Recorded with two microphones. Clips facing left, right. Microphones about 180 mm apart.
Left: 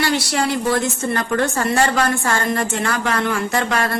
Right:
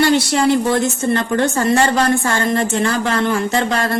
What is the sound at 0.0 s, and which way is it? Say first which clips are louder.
A woman's voice: right 6 dB; 25° right (ahead or behind).